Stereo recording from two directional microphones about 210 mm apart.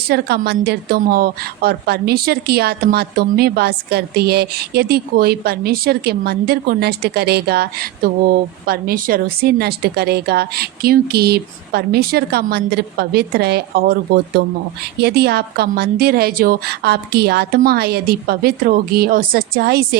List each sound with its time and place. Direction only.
0.1 s a woman's voice: 50° right (ahead or behind)